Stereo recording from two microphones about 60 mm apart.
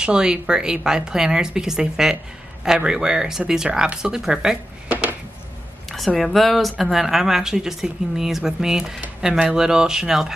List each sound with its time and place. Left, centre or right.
0.0 s speech: centre
4.8 s a sound: right
5.9 s speech: centre